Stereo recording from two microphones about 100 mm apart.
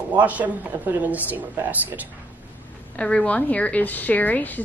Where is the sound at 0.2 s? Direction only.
15° right (ahead or behind).